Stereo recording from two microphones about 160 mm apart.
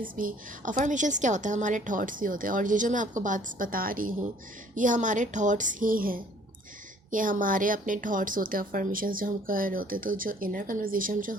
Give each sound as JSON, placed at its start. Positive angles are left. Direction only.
{"t": 0.0, "sound": "a woman's voice", "side_deg": -60}